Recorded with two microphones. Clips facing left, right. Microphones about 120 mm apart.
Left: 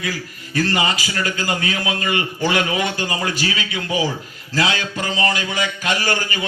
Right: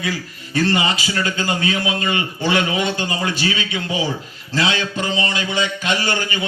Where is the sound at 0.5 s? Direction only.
25° right (ahead or behind).